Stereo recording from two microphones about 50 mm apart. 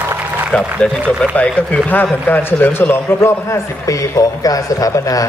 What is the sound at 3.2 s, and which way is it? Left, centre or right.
A man's voice, left.